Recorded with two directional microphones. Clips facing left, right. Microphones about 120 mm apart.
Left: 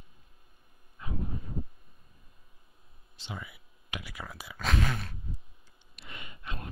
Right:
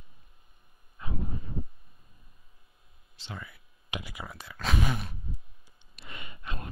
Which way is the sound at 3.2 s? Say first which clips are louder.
Left 1 dB; 15° left (ahead or behind).